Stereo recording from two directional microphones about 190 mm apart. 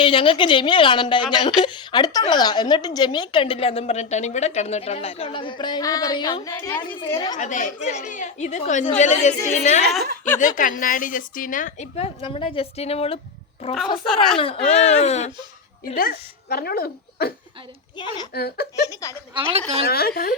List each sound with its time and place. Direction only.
0.0 s a woman's voice: 25° left (ahead or behind)
7.3 s a woman's voice: 40° left (ahead or behind)
16.0 s speech: 50° left (ahead or behind)
18.0 s a woman's voice: 25° left (ahead or behind)
18.3 s speech: 55° left (ahead or behind)
18.9 s a woman's voice: 15° left (ahead or behind)
19.3 s speech: 25° right (ahead or behind)
19.8 s a woman's voice: 55° left (ahead or behind)